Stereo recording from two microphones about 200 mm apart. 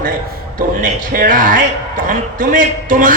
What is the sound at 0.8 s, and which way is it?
A man's voice, 45° right (ahead or behind).